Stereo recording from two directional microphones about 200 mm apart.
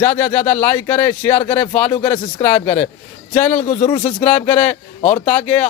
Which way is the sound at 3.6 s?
40° left (ahead or behind).